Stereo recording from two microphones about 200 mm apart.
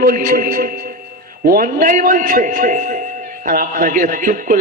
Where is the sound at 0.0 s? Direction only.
45° right (ahead or behind).